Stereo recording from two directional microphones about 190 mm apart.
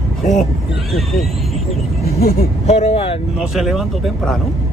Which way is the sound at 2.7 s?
35° left (ahead or behind).